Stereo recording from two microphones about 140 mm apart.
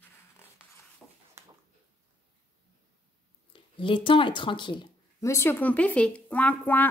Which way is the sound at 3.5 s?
35° left (ahead or behind).